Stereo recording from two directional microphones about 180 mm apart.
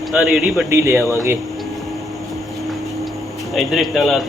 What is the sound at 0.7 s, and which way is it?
Speech, 15° right (ahead or behind).